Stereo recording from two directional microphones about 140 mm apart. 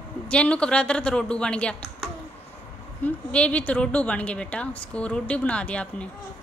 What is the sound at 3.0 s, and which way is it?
A woman's voice, 10° left (ahead or behind).